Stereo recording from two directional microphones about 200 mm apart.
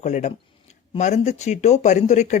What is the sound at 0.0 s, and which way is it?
Speech, 35° left (ahead or behind).